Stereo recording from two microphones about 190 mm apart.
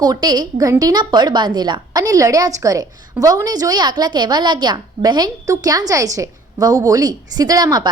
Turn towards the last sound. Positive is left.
turn(degrees=-20)  # may be behind; listen again after turning